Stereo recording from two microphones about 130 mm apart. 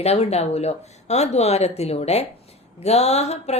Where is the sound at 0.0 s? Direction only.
55° left (ahead or behind).